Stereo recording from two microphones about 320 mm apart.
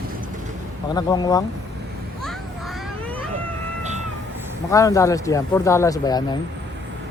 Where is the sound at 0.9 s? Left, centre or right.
Centre.